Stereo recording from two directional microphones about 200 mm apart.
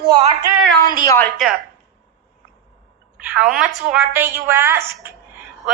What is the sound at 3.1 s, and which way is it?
A woman's voice, 5° right (ahead or behind).